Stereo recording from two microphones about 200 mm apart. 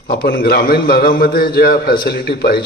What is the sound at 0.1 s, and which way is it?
A man's voice, 50° left (ahead or behind).